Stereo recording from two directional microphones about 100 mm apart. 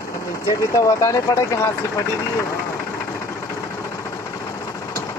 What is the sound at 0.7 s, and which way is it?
Speech, 35° left (ahead or behind).